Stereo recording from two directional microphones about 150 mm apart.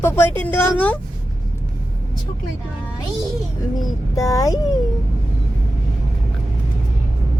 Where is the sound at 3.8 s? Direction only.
25° left (ahead or behind).